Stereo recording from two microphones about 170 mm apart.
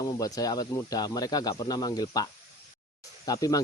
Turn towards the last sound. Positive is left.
turn(degrees=20)  # may be behind; listen again after turning